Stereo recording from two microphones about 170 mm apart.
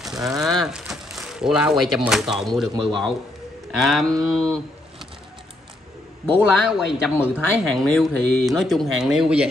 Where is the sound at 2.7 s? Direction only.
25° right (ahead or behind).